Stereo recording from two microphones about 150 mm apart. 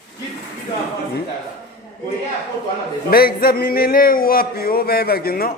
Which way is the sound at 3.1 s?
80° left.